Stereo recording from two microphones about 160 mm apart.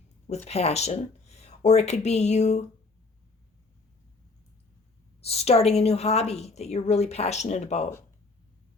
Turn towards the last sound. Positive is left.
turn(degrees=45)  # may be behind; listen again after turning